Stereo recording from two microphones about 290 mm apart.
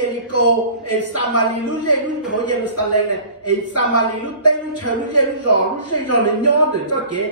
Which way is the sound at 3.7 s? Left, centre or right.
Left.